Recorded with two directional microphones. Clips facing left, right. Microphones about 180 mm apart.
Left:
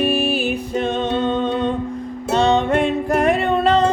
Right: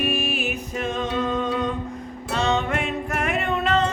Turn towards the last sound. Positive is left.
turn(degrees=35)  # may be behind; listen again after turning